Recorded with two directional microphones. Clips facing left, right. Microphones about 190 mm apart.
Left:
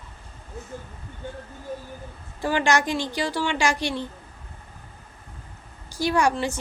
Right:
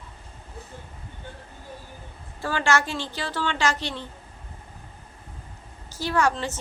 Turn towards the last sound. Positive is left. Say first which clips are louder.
# left 2 dB
turn(degrees=15)  # may be behind; listen again after turning